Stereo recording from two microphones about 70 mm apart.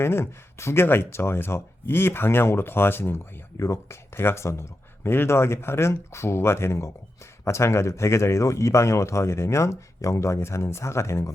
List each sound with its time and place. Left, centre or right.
0.0 s speech: left